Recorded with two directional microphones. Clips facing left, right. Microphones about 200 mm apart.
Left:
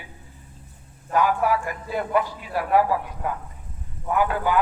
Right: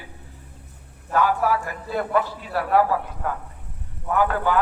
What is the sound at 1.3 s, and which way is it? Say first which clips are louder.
Speech: even; 40° right (ahead or behind).